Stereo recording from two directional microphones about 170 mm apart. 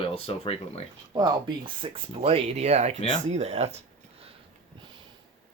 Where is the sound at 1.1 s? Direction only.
25° right (ahead or behind).